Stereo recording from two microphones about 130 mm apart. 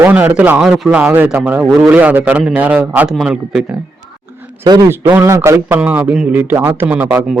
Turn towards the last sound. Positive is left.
turn(degrees=-10)  # may be behind; listen again after turning